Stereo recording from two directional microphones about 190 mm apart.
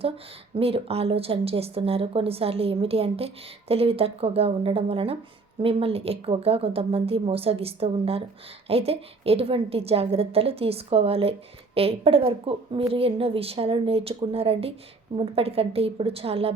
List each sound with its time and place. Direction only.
0.5 s speech: 30° right (ahead or behind)